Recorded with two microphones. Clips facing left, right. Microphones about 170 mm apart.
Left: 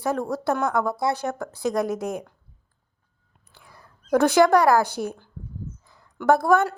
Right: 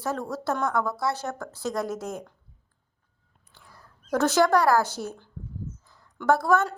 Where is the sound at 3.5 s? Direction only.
15° left (ahead or behind).